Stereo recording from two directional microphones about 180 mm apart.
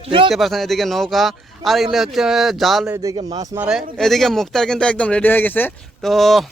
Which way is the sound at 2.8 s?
20° right (ahead or behind).